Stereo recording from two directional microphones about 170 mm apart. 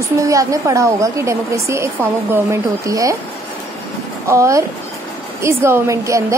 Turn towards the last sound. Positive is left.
turn(degrees=-20)  # may be behind; listen again after turning